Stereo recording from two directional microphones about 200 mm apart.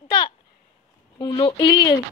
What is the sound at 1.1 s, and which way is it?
Speech, 20° left (ahead or behind).